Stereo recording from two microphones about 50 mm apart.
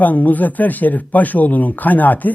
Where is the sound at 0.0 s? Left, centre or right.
Left.